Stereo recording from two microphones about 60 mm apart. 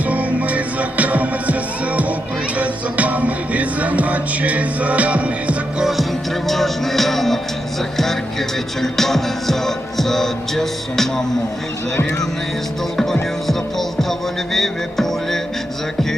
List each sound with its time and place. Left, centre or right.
0.1 s music: right
2.6 s music: right
6.5 s music: centre
13.5 s music: centre